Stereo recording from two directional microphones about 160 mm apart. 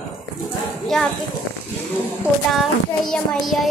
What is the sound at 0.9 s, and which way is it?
Speech, 5° left (ahead or behind).